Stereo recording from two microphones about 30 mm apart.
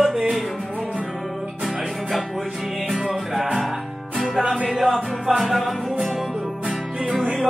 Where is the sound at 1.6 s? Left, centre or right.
Centre.